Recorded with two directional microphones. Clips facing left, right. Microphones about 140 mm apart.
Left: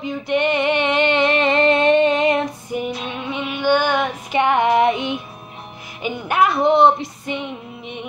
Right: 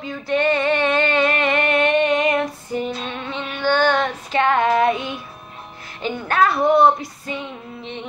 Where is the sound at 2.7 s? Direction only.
15° left (ahead or behind).